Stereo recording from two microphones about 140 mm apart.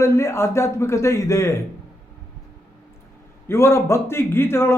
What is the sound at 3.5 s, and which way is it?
A man's voice, 20° left (ahead or behind).